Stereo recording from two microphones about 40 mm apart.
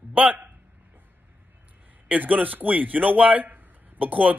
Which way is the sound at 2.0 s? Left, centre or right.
Right.